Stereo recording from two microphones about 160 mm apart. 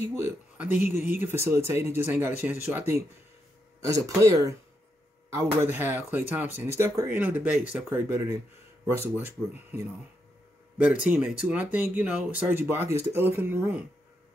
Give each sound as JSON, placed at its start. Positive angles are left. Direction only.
{"t": 0.0, "sound": "speech", "side_deg": -10}
{"t": 11.1, "sound": "speech", "side_deg": -10}